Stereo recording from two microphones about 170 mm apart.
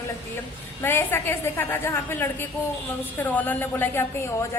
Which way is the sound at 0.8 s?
15° left (ahead or behind).